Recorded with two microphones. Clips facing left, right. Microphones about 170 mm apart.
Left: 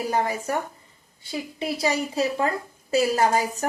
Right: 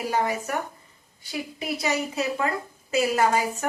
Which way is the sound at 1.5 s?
30° left (ahead or behind).